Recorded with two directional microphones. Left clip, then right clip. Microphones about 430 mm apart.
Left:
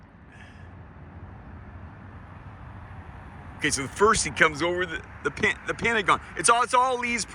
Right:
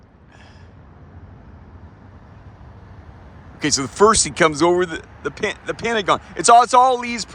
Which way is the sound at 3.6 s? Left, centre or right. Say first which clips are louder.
Right 7 dB; centre.